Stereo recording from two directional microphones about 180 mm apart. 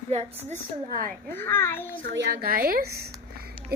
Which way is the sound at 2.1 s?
70° right (ahead or behind).